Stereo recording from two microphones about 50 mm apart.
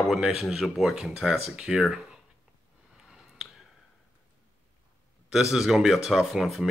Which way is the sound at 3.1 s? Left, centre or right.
Centre.